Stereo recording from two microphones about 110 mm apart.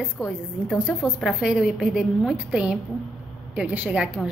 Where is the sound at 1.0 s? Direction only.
5° right (ahead or behind).